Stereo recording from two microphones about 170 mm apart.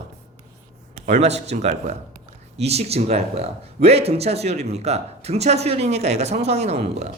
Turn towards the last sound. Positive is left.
turn(degrees=-35)  # may be behind; listen again after turning